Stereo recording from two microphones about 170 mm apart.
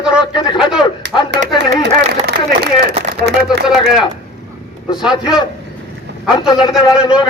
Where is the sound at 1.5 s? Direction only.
80° right.